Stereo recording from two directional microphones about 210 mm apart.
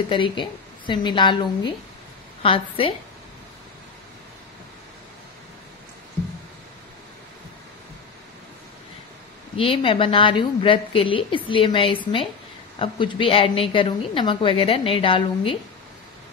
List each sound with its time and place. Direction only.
0.1 s a woman's voice: 25° left (ahead or behind)
9.6 s a woman's voice: 25° left (ahead or behind)